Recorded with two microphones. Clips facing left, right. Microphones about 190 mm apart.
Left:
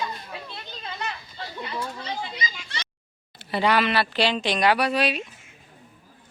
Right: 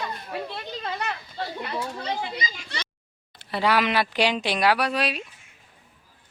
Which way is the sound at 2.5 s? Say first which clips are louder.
Right 2 dB; 45° right (ahead or behind).